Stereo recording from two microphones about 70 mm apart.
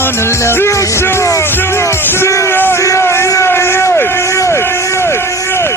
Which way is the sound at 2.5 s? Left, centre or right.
Left.